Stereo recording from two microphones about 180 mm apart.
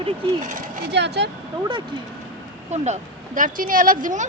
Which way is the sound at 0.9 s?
70° right (ahead or behind).